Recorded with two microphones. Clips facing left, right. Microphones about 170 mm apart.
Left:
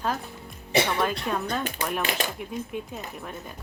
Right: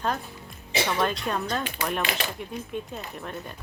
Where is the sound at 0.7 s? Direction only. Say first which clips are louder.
Left 4 dB; 55° left (ahead or behind).